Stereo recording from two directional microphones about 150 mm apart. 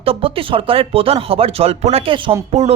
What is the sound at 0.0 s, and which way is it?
Speech, 40° right (ahead or behind).